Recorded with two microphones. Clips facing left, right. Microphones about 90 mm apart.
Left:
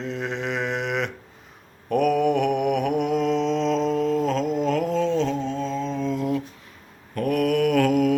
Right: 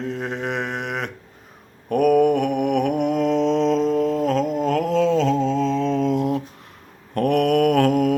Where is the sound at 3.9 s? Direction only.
50° right (ahead or behind).